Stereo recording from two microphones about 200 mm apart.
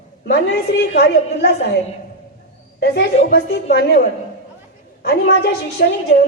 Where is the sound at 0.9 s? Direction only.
55° left (ahead or behind).